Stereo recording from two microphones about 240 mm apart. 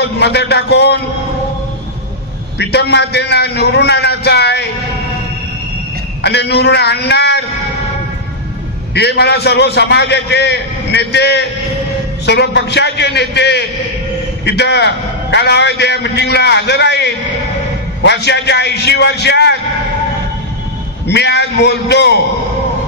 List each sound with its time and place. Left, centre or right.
0.0 s a man's voice: left
2.6 s a man's voice: left
6.2 s a man's voice: left
8.9 s a man's voice: left
21.1 s a man's voice: left